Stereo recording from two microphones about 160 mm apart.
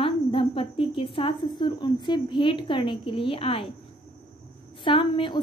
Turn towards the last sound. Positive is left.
turn(degrees=30)  # may be behind; listen again after turning